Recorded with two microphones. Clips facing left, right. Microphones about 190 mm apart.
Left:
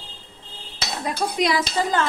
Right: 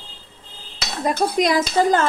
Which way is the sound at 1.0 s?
45° right (ahead or behind).